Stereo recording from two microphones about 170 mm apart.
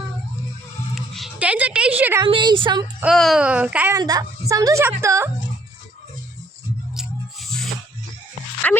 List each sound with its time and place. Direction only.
0.9 s a sound: centre (ahead or behind)
2.2 s a woman's voice: 30° right (ahead or behind)
3.0 s a woman's voice: centre (ahead or behind)
3.9 s a woman's voice: 20° right (ahead or behind)
6.9 s a sound: centre (ahead or behind)
8.6 s speech: 10° left (ahead or behind)